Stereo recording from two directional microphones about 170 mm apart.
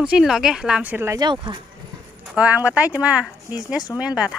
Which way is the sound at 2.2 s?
10° right (ahead or behind).